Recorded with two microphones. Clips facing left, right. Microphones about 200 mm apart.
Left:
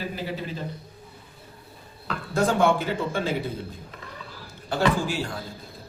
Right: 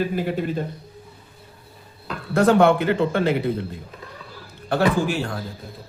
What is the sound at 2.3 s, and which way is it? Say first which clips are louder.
A man's voice: right 6 dB; 65° right (ahead or behind).